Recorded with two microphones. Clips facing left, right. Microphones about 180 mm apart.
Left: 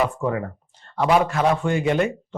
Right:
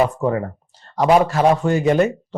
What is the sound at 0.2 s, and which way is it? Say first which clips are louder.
A man's voice: right 4 dB; 35° right (ahead or behind).